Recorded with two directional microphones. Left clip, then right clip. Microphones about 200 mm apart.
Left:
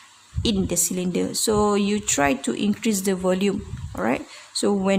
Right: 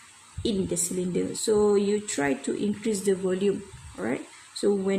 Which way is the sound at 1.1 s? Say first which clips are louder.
Left 2 dB; 50° left (ahead or behind).